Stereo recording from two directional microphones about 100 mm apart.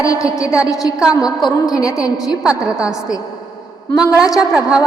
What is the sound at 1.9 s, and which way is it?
A woman's voice, 10° right (ahead or behind).